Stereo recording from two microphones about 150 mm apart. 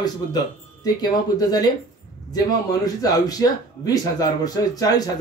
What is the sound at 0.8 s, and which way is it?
Speech, 25° left (ahead or behind).